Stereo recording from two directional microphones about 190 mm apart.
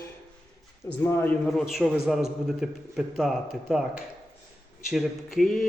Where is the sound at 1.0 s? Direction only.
10° left (ahead or behind).